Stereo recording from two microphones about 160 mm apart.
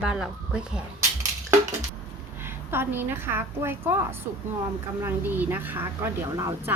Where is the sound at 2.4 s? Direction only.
15° right (ahead or behind).